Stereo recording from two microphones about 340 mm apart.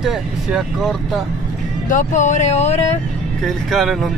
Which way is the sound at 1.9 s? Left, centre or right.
Left.